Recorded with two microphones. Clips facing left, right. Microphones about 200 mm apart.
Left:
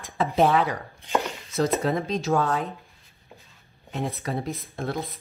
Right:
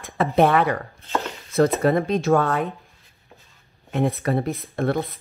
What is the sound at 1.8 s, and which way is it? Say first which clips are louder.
Speech: right 6 dB; 60° right (ahead or behind).